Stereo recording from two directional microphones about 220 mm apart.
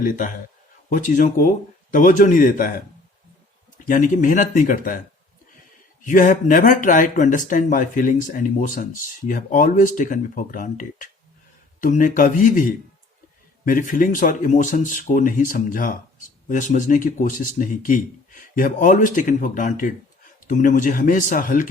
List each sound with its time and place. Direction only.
0.0 s speech: 35° left (ahead or behind)
3.8 s speech: 35° left (ahead or behind)